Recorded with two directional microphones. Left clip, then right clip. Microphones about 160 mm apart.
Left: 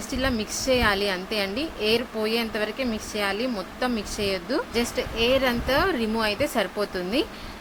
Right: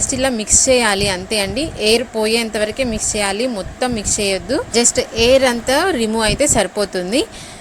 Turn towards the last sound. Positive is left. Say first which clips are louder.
# right 8 dB
turn(degrees=-35)  # may be behind; listen again after turning